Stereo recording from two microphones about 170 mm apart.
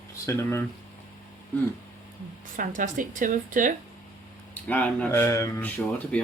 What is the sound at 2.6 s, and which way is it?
Speech, 50° right (ahead or behind).